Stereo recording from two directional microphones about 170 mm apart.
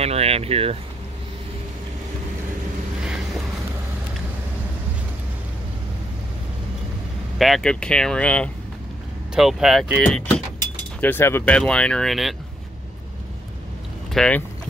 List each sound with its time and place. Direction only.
0.0 s speech: 35° right (ahead or behind)
7.3 s speech: centre (ahead or behind)
14.1 s speech: 5° left (ahead or behind)